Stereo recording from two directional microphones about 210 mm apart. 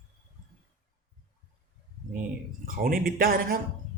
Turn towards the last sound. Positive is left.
turn(degrees=-45)  # may be behind; listen again after turning